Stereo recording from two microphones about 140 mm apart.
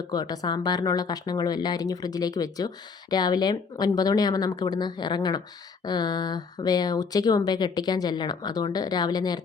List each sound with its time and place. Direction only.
0.1 s speech: 30° left (ahead or behind)